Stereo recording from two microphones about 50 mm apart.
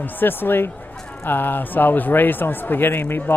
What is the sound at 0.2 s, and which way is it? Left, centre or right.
Speech, left.